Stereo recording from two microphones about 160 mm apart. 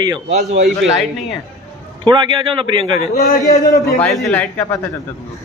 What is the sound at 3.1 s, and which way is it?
Speech, 65° left (ahead or behind).